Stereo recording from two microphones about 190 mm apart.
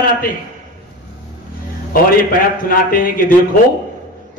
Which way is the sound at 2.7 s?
50° left (ahead or behind).